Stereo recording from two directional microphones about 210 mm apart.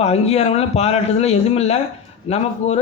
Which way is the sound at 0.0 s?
30° left (ahead or behind).